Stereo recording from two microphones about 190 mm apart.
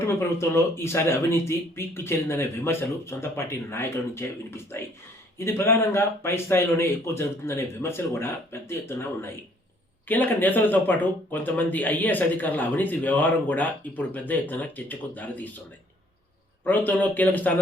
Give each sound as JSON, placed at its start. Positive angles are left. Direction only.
{"t": 0.0, "sound": "speech", "side_deg": 15}
{"t": 16.6, "sound": "speech", "side_deg": 10}